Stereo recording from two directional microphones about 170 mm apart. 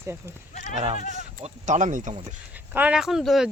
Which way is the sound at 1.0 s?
45° left (ahead or behind).